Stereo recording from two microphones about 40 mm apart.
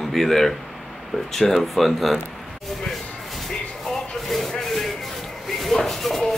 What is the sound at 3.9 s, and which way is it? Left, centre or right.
Rub, centre.